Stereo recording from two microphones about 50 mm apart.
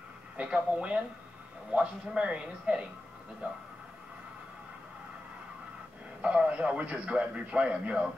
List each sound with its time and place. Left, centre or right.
0.4 s a man's voice: right
6.2 s a man's voice: right